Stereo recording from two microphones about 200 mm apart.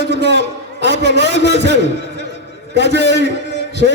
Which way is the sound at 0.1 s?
60° right (ahead or behind).